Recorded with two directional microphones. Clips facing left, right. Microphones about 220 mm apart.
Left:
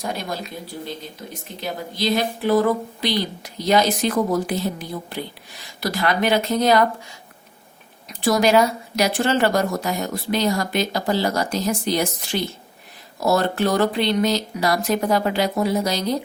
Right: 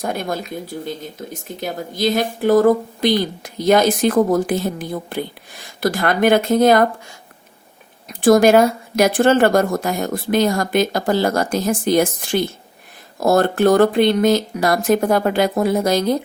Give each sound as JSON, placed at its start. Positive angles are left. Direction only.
{"t": 0.0, "sound": "speech", "side_deg": -50}
{"t": 8.0, "sound": "speech", "side_deg": -50}